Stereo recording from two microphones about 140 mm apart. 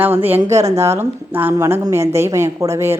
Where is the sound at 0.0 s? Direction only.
15° right (ahead or behind).